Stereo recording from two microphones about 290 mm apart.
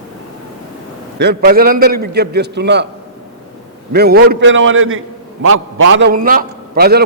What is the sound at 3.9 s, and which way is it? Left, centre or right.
A man's voice, right.